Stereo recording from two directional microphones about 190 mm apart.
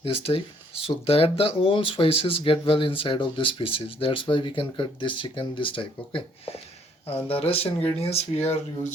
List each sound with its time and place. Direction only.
0.0 s speech: 30° left (ahead or behind)